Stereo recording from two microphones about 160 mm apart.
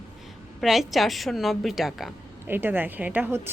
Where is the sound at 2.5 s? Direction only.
15° right (ahead or behind).